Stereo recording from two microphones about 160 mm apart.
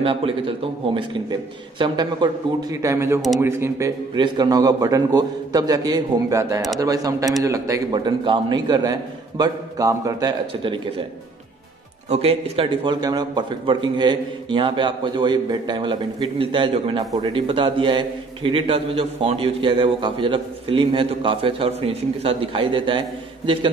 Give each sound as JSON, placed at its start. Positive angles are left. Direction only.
{"t": 0.0, "sound": "a man's voice", "side_deg": -35}
{"t": 12.1, "sound": "a man's voice", "side_deg": -35}